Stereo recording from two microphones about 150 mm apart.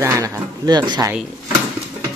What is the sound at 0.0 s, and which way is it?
Speech, 20° right (ahead or behind).